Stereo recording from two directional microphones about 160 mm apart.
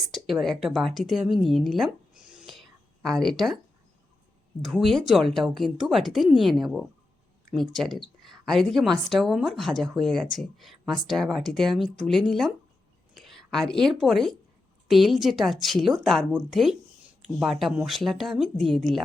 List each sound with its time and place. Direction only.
0.0 s speech: centre (ahead or behind)
2.3 s whispering: 5° right (ahead or behind)
4.6 s speech: centre (ahead or behind)